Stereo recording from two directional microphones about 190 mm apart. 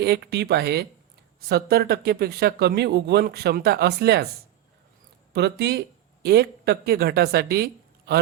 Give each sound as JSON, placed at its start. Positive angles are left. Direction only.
{"t": 0.0, "sound": "speech", "side_deg": -60}
{"t": 5.3, "sound": "speech", "side_deg": -60}